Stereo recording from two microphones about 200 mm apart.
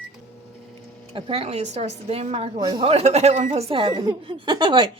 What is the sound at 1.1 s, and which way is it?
A woman's voice, 25° right (ahead or behind).